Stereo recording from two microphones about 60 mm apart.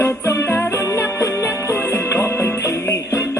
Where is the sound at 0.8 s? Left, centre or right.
Left.